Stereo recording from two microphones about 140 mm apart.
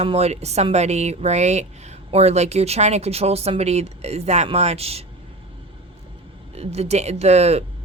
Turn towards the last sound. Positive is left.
turn(degrees=-50)  # may be behind; listen again after turning